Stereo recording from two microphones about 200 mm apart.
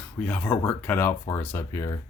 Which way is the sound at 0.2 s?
5° left (ahead or behind).